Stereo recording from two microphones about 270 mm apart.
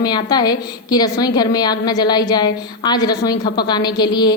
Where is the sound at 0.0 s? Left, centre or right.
Centre.